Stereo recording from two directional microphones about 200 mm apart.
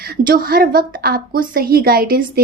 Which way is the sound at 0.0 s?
50° right (ahead or behind).